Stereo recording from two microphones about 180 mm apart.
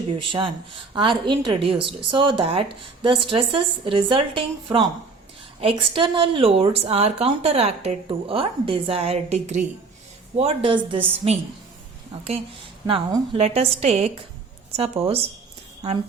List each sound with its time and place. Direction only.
0.2 s a woman's voice: 30° right (ahead or behind)
12.9 s speech: 20° right (ahead or behind)
13.3 s a woman's voice: 35° right (ahead or behind)